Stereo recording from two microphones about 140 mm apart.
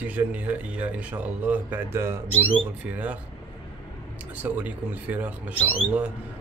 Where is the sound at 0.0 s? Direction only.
10° right (ahead or behind).